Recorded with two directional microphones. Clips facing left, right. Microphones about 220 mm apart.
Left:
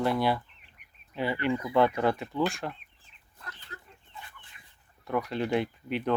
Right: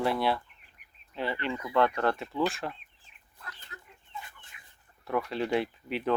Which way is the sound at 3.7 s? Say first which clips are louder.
Left 3 dB; 35° left (ahead or behind).